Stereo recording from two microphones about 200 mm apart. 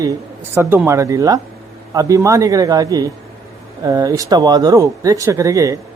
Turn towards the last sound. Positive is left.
turn(degrees=-15)  # may be behind; listen again after turning